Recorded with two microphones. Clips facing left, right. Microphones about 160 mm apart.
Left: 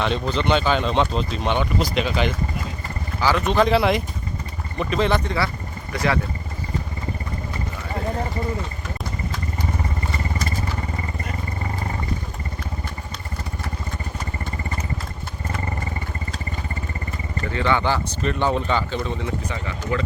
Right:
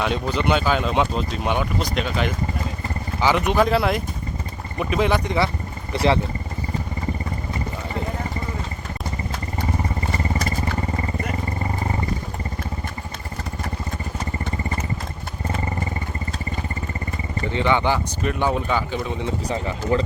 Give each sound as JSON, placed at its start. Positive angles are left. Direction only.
{"t": 0.0, "sound": "speech", "side_deg": -10}
{"t": 3.2, "sound": "speech", "side_deg": -20}
{"t": 3.7, "sound": "speech", "side_deg": 0}
{"t": 5.9, "sound": "speech", "side_deg": -25}
{"t": 17.4, "sound": "speech", "side_deg": -15}
{"t": 19.5, "sound": "speech", "side_deg": -35}